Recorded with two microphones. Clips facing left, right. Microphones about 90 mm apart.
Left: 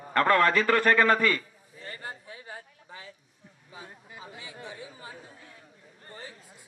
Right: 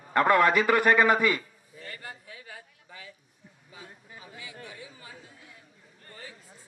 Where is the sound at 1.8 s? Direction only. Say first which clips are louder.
Left 2 dB; 30° left (ahead or behind).